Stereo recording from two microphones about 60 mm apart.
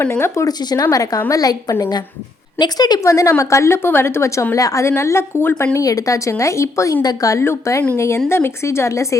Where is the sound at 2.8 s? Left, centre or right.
Left.